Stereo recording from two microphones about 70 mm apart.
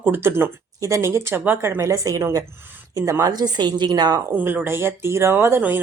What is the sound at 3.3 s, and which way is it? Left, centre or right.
Speech, right.